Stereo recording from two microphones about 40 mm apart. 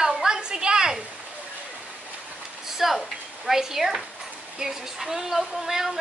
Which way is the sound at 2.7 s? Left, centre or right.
Centre.